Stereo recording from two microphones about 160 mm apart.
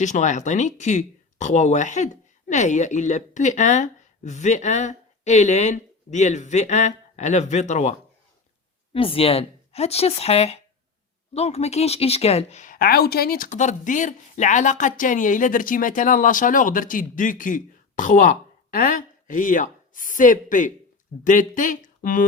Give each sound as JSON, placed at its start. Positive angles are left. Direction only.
{"t": 0.0, "sound": "speech", "side_deg": 50}
{"t": 8.9, "sound": "speech", "side_deg": 35}